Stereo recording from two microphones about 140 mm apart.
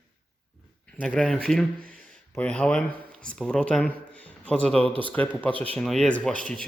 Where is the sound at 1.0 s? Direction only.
5° left (ahead or behind).